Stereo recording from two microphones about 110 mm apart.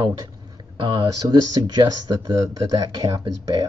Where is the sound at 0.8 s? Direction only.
45° right (ahead or behind).